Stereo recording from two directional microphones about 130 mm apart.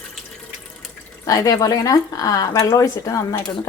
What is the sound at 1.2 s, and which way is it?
Speech, 30° left (ahead or behind).